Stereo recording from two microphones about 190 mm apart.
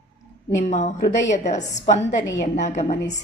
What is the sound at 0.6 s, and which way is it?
Speech, 35° left (ahead or behind).